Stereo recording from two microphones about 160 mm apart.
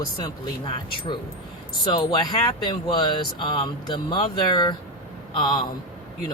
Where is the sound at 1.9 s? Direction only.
25° left (ahead or behind).